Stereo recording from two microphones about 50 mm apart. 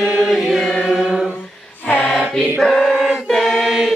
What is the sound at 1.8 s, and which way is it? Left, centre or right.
Mantra, left.